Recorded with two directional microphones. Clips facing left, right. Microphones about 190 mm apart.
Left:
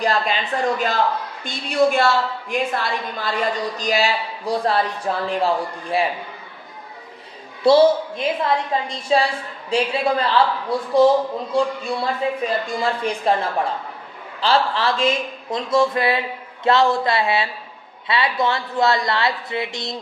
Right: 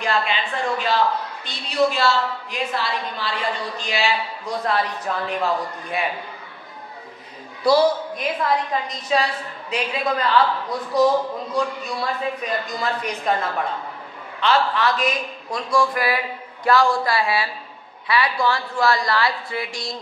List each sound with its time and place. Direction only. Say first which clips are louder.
0.0 s a woman's voice: left 2 dB; 40° left (ahead or behind)
7.6 s a woman's voice: left 4 dB; 25° left (ahead or behind)
14.4 s a woman's voice: even; 30° left (ahead or behind)